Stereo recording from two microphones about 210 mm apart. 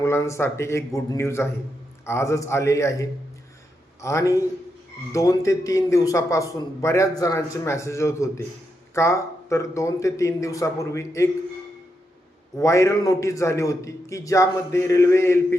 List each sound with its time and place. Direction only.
0.0 s a man's voice: 15° left (ahead or behind)
12.5 s a man's voice: 15° left (ahead or behind)